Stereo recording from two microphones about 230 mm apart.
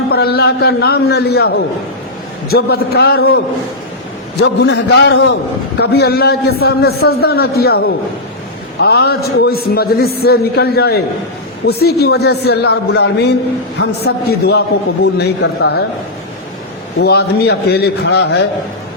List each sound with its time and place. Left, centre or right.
0.1 s a man's voice: left
4.4 s a man's voice: left
17.0 s a man's voice: left